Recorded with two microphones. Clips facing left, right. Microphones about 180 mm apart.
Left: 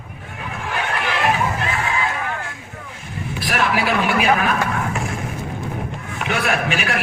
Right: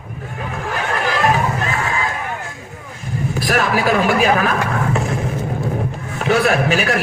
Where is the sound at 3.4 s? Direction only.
40° right (ahead or behind).